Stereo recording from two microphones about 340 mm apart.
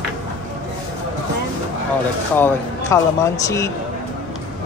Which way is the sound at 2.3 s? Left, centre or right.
Centre.